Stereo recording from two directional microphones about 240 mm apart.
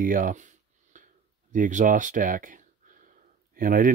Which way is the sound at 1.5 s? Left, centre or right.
Right.